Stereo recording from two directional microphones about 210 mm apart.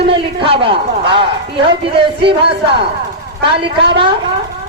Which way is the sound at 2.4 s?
50° right (ahead or behind).